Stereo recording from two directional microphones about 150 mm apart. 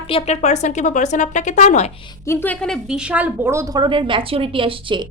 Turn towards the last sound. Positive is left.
turn(degrees=-35)  # may be behind; listen again after turning